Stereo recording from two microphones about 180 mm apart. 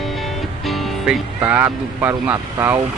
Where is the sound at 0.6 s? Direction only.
Centre (ahead or behind).